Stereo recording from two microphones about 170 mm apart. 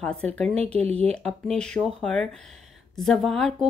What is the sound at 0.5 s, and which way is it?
Speech, 35° right (ahead or behind).